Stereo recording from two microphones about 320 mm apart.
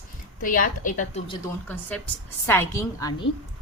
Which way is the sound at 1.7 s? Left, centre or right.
Centre.